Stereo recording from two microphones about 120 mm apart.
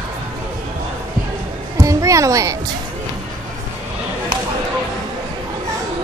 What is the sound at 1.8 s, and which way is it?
Music, 25° right (ahead or behind).